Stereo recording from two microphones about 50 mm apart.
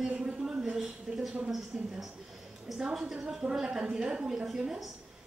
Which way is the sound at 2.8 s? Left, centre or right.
Centre.